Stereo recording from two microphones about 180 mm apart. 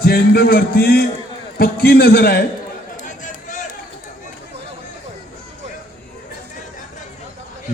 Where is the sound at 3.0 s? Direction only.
45° left (ahead or behind).